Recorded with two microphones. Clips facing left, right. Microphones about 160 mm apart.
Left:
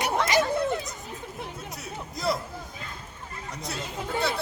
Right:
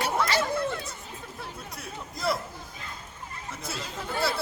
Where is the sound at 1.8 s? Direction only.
Centre (ahead or behind).